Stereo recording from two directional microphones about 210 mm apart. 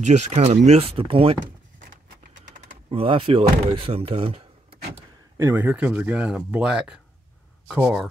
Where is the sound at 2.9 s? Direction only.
25° right (ahead or behind).